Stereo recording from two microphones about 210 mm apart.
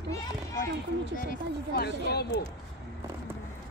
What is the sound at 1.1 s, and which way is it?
Speech, 45° left (ahead or behind).